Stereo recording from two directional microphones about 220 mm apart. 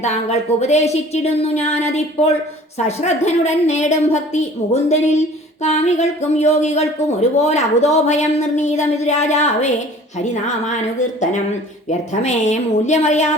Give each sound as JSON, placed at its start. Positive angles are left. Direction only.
{"t": 0.0, "sound": "speech", "side_deg": 30}
{"t": 11.9, "sound": "speech", "side_deg": 30}